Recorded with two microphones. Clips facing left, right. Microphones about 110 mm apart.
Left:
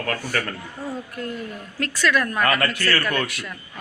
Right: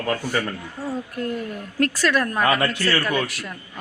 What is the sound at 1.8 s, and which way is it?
A woman's voice, 40° right (ahead or behind).